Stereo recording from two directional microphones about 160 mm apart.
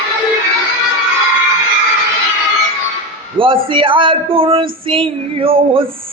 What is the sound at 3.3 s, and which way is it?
Speech, 35° right (ahead or behind).